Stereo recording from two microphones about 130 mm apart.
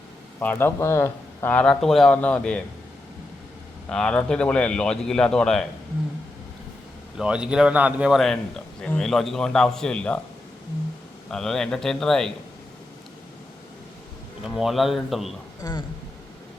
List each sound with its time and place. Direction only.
0.3 s speech: 15° left (ahead or behind)
3.8 s a man's voice: 5° left (ahead or behind)
7.2 s speech: 10° right (ahead or behind)
8.2 s a man's voice: 5° left (ahead or behind)
11.3 s a man's voice: 5° left (ahead or behind)
14.4 s a man's voice: centre (ahead or behind)
15.6 s speech: 30° left (ahead or behind)